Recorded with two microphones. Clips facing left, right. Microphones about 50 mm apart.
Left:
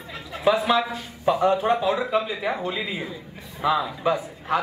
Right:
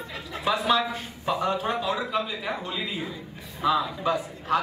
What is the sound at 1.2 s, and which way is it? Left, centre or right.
A man's voice, centre.